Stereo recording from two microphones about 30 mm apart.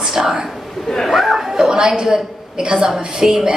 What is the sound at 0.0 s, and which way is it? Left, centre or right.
Speech, centre.